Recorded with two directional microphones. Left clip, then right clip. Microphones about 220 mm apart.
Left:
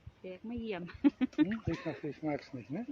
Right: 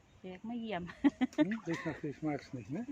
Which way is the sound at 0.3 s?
40° right (ahead or behind).